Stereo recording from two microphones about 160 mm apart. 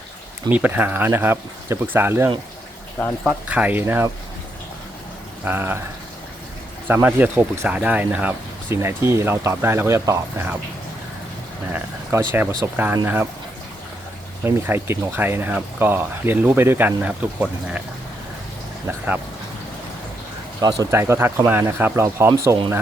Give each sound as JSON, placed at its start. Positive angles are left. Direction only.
{"t": 0.5, "sound": "speech", "side_deg": -10}
{"t": 5.5, "sound": "speech", "side_deg": -15}
{"t": 6.8, "sound": "speech", "side_deg": -10}
{"t": 11.7, "sound": "speech", "side_deg": -15}
{"t": 14.4, "sound": "speech", "side_deg": -15}
{"t": 18.9, "sound": "speech", "side_deg": -10}
{"t": 20.6, "sound": "speech", "side_deg": -20}